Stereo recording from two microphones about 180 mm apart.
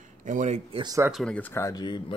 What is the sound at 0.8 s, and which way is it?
Speech, 20° right (ahead or behind).